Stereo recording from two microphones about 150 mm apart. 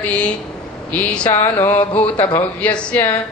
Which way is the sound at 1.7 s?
40° left (ahead or behind).